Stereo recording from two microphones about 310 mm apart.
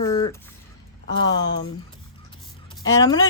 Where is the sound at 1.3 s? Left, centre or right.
Left.